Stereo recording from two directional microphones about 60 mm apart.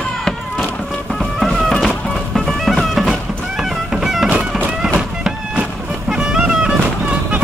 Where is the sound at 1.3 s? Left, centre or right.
Centre.